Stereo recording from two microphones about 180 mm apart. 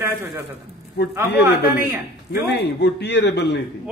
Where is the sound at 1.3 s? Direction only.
65° left (ahead or behind).